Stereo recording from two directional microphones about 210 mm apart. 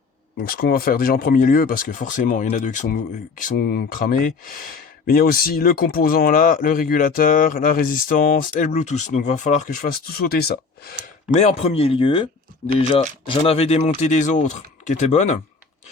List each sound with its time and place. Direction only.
0.4 s speech: 45° left (ahead or behind)
3.4 s speech: 45° left (ahead or behind)
11.3 s speech: 30° left (ahead or behind)